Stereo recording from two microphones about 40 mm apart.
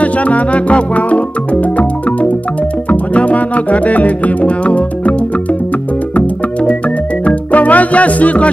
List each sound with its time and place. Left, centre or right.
0.0 s music: left